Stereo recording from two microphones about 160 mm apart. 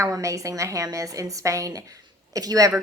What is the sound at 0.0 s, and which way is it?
A woman's voice, 20° right (ahead or behind).